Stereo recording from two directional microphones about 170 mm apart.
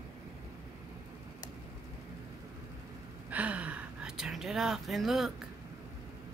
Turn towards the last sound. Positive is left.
turn(degrees=0)  # may be behind; listen again after turning